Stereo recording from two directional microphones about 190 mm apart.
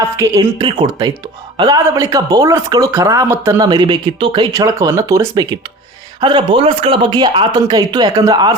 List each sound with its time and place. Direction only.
0.2 s speech: 20° right (ahead or behind)